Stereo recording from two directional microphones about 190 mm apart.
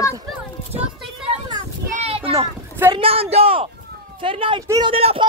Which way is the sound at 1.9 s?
30° right (ahead or behind).